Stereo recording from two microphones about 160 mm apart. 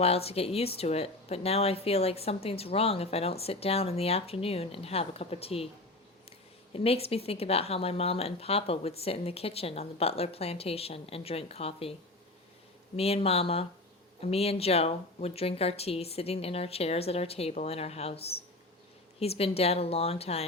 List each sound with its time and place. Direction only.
0.0 s speech: 40° left (ahead or behind)
6.7 s speech: 40° left (ahead or behind)
13.0 s speech: 40° left (ahead or behind)